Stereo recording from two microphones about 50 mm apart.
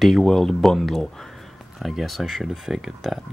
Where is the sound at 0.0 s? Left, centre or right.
Centre.